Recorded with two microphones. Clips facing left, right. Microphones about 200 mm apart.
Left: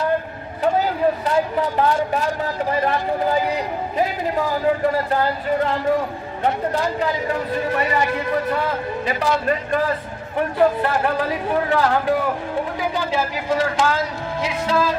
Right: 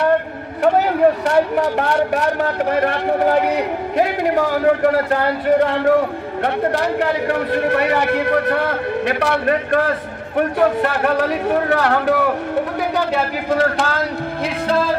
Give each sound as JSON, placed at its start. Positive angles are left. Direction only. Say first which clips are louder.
{"t": 0.0, "sound": "speech", "louder": "right 5 dB", "side_deg": -70}